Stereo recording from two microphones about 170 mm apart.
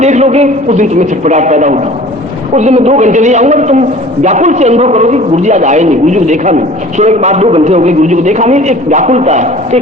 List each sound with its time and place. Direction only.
0.0 s a man's voice: 40° right (ahead or behind)